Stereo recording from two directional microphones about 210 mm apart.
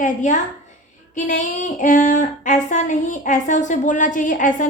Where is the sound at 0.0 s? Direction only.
35° left (ahead or behind).